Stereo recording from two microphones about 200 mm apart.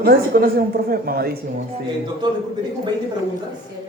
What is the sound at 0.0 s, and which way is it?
A woman's voice, 50° right (ahead or behind).